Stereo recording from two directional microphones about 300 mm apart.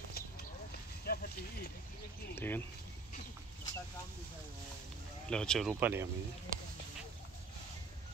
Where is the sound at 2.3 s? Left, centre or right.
Centre.